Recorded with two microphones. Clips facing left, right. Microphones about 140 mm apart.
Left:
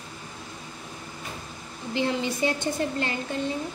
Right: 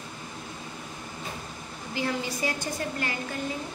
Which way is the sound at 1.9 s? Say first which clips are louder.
Left 4 dB; 25° left (ahead or behind).